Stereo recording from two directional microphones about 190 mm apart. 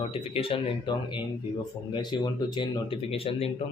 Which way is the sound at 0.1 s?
30° left (ahead or behind).